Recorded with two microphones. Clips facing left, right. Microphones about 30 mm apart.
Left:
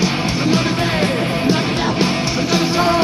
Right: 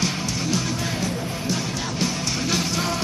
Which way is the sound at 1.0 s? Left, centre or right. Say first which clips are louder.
Left 9 dB; left.